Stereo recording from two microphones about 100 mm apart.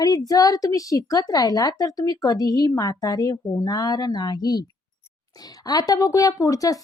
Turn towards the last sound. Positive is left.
turn(degrees=35)  # may be behind; listen again after turning